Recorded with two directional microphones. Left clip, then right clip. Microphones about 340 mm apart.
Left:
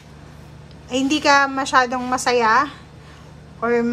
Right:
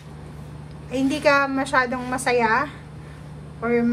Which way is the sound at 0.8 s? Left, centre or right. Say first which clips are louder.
Left 3 dB; centre.